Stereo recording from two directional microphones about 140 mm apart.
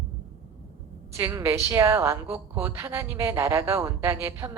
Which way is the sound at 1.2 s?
20° right (ahead or behind).